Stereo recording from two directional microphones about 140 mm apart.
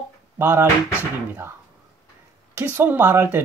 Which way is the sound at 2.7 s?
15° right (ahead or behind).